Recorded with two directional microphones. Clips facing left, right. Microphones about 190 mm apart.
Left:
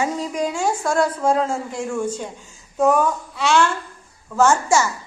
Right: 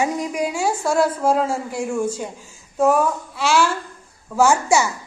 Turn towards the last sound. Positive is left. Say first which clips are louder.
# even
turn(degrees=-10)  # may be behind; listen again after turning